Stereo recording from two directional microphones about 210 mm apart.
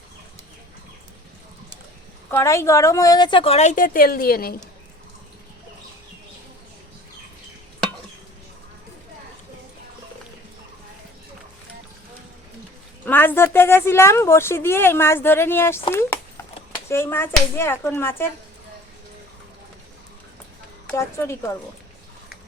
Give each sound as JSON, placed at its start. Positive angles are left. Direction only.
{"t": 2.3, "sound": "a woman's voice", "side_deg": 15}
{"t": 13.1, "sound": "a woman's voice", "side_deg": 10}
{"t": 20.8, "sound": "speech", "side_deg": 10}